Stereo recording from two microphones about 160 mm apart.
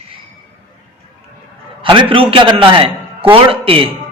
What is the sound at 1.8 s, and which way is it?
A man's voice, 30° right (ahead or behind).